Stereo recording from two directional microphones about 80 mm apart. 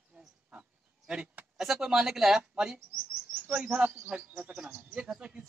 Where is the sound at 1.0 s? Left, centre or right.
Centre.